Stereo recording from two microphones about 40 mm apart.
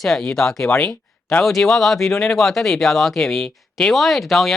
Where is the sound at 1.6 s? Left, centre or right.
Centre.